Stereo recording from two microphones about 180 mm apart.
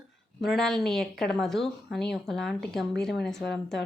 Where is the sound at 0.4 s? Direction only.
Centre (ahead or behind).